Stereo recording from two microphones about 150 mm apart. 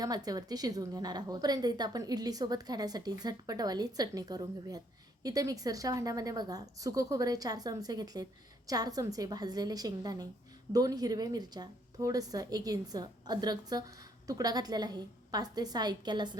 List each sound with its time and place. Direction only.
0.0 s a woman's voice: 25° right (ahead or behind)